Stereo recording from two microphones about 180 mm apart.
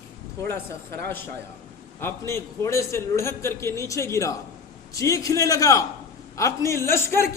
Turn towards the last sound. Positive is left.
turn(degrees=15)  # may be behind; listen again after turning